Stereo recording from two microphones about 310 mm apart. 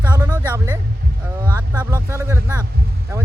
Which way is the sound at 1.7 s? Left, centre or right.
Centre.